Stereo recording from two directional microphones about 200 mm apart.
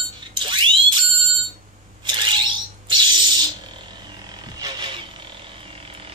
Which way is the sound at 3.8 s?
20° right (ahead or behind).